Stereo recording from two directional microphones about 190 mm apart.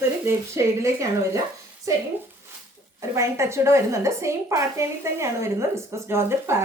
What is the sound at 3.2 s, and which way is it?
A woman's voice, 15° right (ahead or behind).